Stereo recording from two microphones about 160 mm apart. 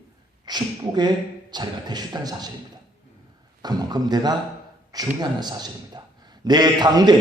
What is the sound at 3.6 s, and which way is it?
A man's voice, 25° right (ahead or behind).